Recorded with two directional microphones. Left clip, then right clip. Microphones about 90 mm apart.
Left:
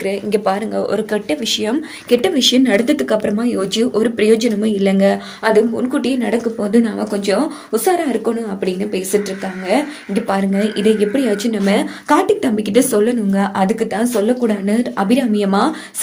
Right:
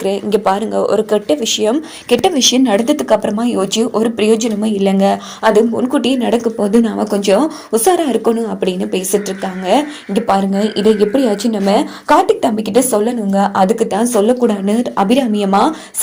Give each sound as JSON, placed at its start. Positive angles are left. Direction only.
{"t": 0.0, "sound": "speech", "side_deg": -55}
{"t": 0.9, "sound": "speech", "side_deg": -35}
{"t": 2.0, "sound": "speech", "side_deg": -65}
{"t": 2.6, "sound": "speech", "side_deg": -40}
{"t": 3.3, "sound": "speech", "side_deg": -65}
{"t": 3.9, "sound": "speech", "side_deg": -40}
{"t": 7.1, "sound": "speech", "side_deg": -70}
{"t": 7.7, "sound": "speech", "side_deg": -50}
{"t": 10.5, "sound": "speech", "side_deg": -30}
{"t": 13.7, "sound": "speech", "side_deg": -50}
{"t": 15.4, "sound": "speech", "side_deg": -30}